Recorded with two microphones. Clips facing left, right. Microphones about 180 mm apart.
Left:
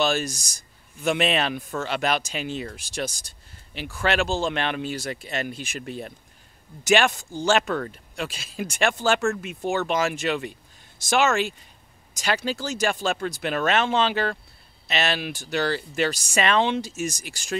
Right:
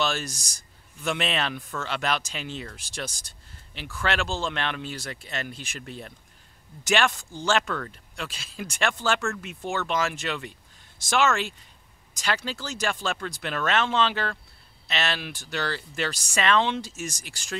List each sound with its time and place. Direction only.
0.0 s speech: 10° left (ahead or behind)
12.6 s speech: 10° left (ahead or behind)